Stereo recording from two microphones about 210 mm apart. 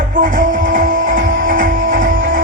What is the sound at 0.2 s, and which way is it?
Music, 40° right (ahead or behind).